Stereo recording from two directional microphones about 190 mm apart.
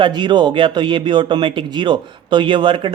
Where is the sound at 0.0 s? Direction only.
25° right (ahead or behind).